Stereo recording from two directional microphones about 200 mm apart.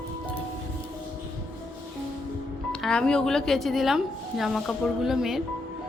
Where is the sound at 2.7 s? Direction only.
5° left (ahead or behind).